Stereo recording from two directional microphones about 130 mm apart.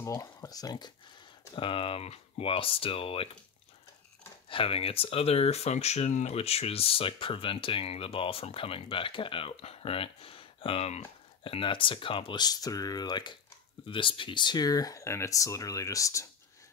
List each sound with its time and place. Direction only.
0.0 s speech: 25° left (ahead or behind)
1.5 s speech: 45° left (ahead or behind)
4.5 s speech: 45° left (ahead or behind); by 16.3 s 25° left (ahead or behind)